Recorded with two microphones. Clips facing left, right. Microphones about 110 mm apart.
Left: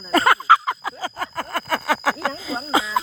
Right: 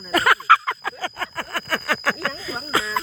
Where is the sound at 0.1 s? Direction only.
30° left (ahead or behind).